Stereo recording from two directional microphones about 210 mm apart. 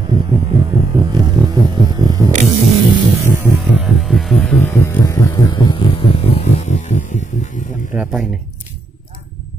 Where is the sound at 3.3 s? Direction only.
5° right (ahead or behind); by 8.0 s 35° left (ahead or behind).